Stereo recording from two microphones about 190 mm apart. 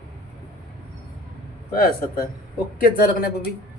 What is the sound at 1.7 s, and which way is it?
Speech, 50° left (ahead or behind).